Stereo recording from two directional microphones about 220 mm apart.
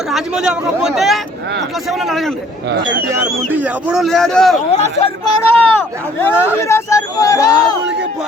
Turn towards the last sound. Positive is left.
turn(degrees=15)  # may be behind; listen again after turning